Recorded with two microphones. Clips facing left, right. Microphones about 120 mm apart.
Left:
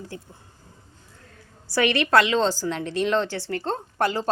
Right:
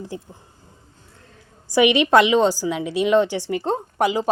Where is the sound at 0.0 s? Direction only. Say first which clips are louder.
Right 5 dB; 15° right (ahead or behind).